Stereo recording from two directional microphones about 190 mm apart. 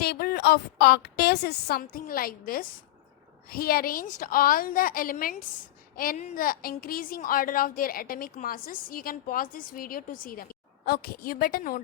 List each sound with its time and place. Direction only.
0.0 s a woman's voice: 55° left (ahead or behind)